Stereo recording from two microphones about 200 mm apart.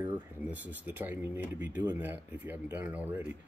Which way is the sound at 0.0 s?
10° right (ahead or behind).